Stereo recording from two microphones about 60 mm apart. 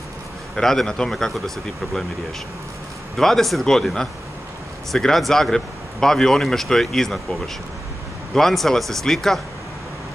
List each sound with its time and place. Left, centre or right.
0.6 s speech: centre
3.2 s speech: centre
8.4 s speech: centre